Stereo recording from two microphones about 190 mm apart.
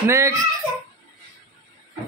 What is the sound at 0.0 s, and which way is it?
Speech, 15° right (ahead or behind).